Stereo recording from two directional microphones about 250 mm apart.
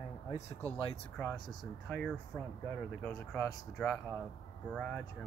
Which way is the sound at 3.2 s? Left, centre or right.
Centre.